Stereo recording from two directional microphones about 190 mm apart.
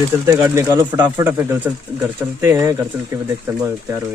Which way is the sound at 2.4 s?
15° right (ahead or behind).